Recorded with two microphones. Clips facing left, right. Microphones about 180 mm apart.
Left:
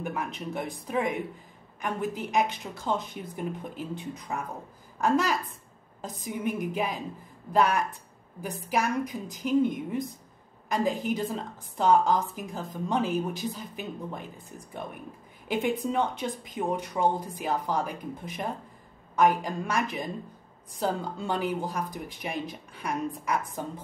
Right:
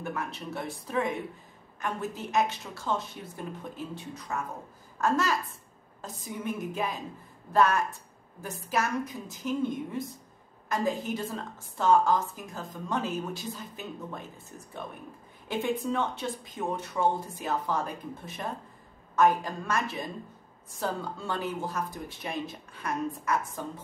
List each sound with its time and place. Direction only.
0.0 s speech: 15° left (ahead or behind)
15.4 s speech: 15° left (ahead or behind)